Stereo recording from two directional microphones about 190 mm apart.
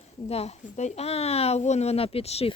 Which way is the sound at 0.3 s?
35° left (ahead or behind).